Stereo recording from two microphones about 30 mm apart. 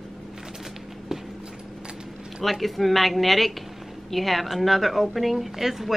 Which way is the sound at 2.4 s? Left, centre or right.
Centre.